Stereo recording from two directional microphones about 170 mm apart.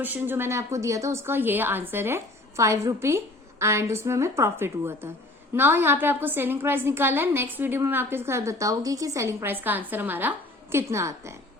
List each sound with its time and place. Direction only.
0.0 s a woman's voice: 10° right (ahead or behind)